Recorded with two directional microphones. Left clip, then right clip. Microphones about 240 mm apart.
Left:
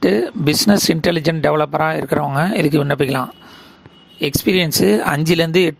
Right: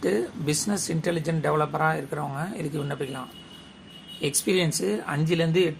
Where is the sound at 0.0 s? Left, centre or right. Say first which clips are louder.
Left 10 dB; left.